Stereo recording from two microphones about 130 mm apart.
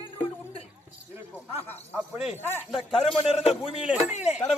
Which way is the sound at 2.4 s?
15° left (ahead or behind).